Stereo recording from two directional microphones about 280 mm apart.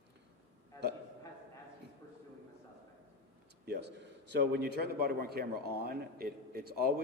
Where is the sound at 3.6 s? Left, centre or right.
Right.